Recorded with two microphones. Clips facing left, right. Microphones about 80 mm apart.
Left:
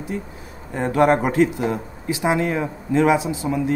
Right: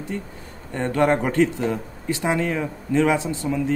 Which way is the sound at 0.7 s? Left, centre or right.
Centre.